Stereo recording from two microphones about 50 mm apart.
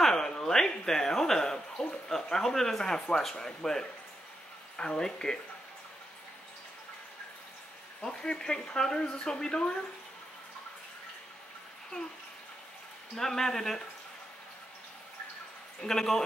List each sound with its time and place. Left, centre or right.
0.0 s a sound: centre
2.0 s speech: centre
8.0 s speech: centre
13.1 s speech: centre
15.8 s speech: centre